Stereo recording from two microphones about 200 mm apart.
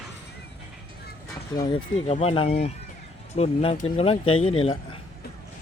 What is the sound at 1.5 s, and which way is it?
Speech, 20° left (ahead or behind).